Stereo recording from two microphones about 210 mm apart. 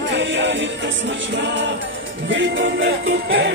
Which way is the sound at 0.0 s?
60° right (ahead or behind).